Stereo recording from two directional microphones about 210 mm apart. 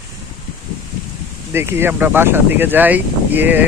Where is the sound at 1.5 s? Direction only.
10° right (ahead or behind).